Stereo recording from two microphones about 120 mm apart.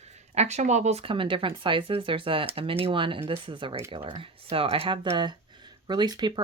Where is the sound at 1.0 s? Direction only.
45° right (ahead or behind).